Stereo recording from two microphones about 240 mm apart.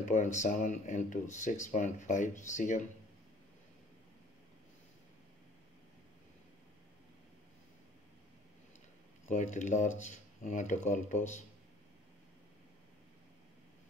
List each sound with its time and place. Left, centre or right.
0.0 s speech: left
9.3 s speech: left